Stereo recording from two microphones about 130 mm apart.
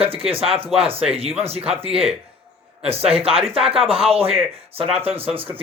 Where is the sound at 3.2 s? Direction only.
45° right (ahead or behind).